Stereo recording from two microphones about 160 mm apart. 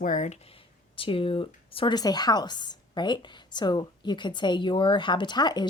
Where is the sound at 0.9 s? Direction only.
35° left (ahead or behind).